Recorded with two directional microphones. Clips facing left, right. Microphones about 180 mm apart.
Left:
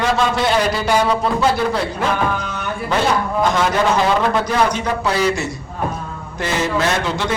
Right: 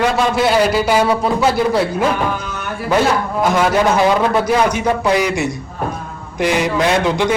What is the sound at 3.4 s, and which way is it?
A man's voice, 10° right (ahead or behind).